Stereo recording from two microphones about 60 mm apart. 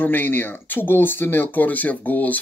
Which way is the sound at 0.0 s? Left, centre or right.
Left.